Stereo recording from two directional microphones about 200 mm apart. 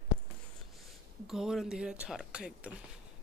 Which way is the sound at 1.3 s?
Centre (ahead or behind).